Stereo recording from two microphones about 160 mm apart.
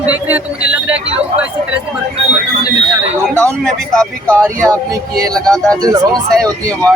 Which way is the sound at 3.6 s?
5° left (ahead or behind).